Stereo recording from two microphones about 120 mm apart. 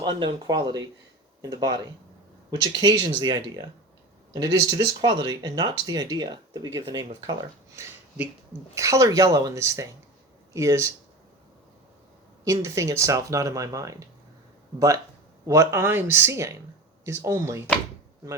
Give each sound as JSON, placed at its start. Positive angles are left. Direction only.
{"t": 0.0, "sound": "speech", "side_deg": -35}
{"t": 2.8, "sound": "speech", "side_deg": -35}
{"t": 8.7, "sound": "speech", "side_deg": -25}
{"t": 12.5, "sound": "speech", "side_deg": -25}